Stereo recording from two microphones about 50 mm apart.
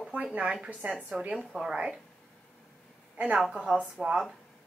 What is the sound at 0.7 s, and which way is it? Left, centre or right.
Speech, right.